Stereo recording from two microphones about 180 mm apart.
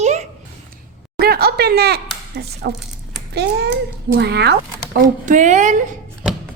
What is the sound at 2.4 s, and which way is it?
A child's voice, 65° right (ahead or behind).